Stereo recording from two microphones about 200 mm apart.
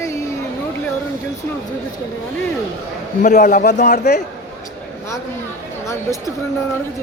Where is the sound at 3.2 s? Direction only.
40° left (ahead or behind).